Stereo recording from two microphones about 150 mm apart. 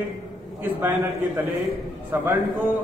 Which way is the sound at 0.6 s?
15° right (ahead or behind).